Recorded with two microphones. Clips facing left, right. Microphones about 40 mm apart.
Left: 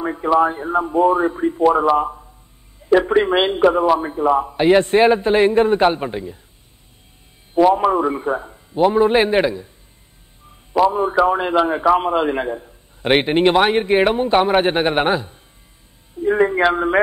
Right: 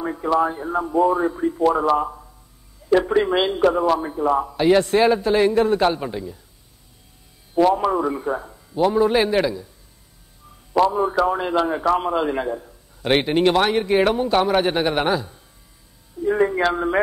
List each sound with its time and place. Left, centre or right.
0.0 s a man's voice: left
2.0 s a sound: centre
2.9 s a man's voice: left
7.5 s a man's voice: centre
10.9 s a man's voice: left